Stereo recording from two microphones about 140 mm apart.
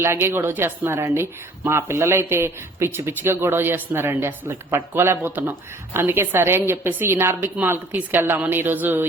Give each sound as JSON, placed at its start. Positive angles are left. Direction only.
{"t": 0.0, "sound": "speech", "side_deg": -15}